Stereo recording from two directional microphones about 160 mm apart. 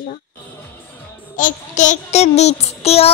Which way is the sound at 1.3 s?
55° left (ahead or behind).